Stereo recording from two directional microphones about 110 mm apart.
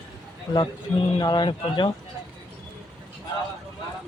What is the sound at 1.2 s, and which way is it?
Speech, 40° left (ahead or behind).